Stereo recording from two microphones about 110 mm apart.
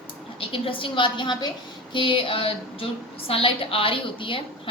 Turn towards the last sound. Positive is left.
turn(degrees=50)  # may be behind; listen again after turning